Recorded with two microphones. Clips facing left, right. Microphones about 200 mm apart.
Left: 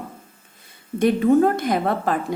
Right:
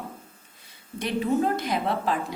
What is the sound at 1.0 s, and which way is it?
A woman's voice, 50° left (ahead or behind).